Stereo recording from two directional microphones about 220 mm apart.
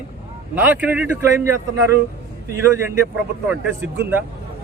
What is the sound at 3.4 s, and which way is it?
Speech, 10° right (ahead or behind).